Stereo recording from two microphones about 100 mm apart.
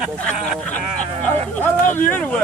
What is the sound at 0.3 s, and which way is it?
Speech, 10° left (ahead or behind).